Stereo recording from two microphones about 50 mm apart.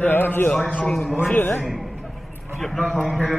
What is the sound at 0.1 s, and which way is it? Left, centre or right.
Speech, left.